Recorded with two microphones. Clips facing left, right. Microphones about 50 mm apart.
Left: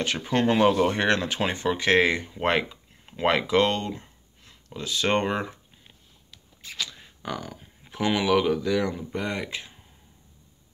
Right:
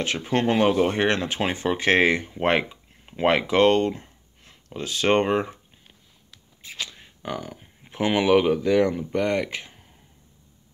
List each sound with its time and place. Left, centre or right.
0.0 s speech: centre
6.6 s a sound: centre
7.2 s speech: right